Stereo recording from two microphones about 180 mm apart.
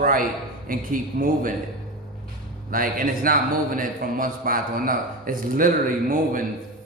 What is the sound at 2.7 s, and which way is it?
A man's voice, 50° right (ahead or behind).